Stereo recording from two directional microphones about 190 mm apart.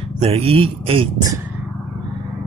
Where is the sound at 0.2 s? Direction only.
30° right (ahead or behind).